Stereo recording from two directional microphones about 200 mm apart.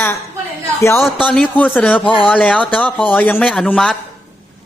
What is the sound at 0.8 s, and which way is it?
Speech, 10° left (ahead or behind).